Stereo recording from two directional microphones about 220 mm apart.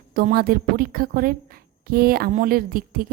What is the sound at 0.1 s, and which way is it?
A woman's voice, 40° right (ahead or behind).